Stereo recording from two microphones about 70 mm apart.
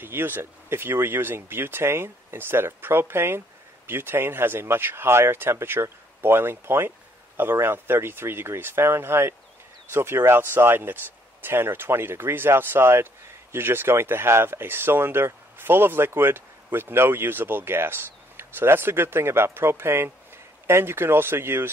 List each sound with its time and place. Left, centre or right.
0.0 s speech: right